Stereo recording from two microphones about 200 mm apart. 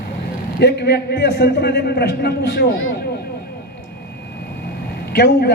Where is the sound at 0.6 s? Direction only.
55° left (ahead or behind).